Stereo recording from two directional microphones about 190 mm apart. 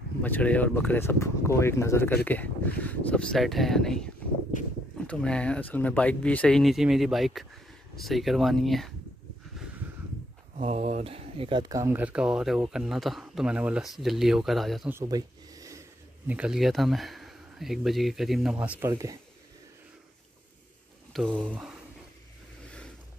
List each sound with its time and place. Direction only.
0.2 s speech: 10° left (ahead or behind)
10.6 s speech: 35° right (ahead or behind); by 14.9 s centre (ahead or behind)
14.9 s a sound: 15° right (ahead or behind)
16.3 s speech: 5° right (ahead or behind)
18.9 s speech: 20° right (ahead or behind)
21.1 s speech: 5° left (ahead or behind)